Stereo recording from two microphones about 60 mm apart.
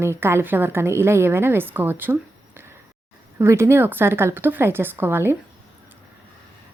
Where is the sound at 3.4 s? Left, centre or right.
Right.